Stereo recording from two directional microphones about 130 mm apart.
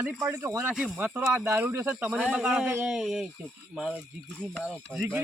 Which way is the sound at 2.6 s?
20° right (ahead or behind).